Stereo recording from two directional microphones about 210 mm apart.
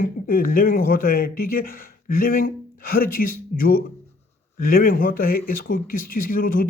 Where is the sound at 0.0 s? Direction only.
45° left (ahead or behind).